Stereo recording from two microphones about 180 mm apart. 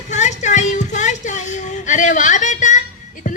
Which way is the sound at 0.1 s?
40° left (ahead or behind).